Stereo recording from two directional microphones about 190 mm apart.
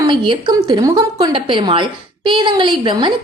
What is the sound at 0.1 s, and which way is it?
A woman's voice, 25° right (ahead or behind).